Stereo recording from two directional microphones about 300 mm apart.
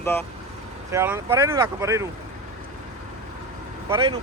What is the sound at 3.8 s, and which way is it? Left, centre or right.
Speech, centre.